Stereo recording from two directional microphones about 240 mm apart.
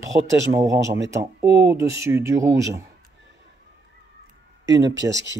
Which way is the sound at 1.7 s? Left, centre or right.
Centre.